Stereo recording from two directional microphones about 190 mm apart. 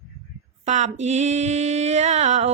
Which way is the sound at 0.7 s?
35° right (ahead or behind).